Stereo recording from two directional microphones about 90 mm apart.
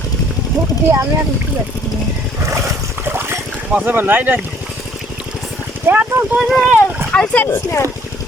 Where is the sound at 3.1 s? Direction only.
25° right (ahead or behind).